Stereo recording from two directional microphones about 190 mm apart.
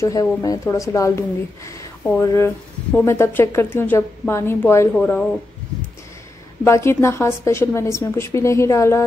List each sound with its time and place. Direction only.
0.0 s speech: 20° left (ahead or behind)
6.6 s speech: 15° left (ahead or behind)